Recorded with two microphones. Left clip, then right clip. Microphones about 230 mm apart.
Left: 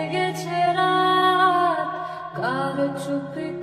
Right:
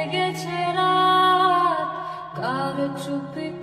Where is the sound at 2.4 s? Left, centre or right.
Right.